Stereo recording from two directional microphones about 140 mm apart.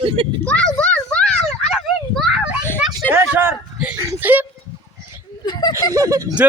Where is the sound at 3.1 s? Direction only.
15° right (ahead or behind).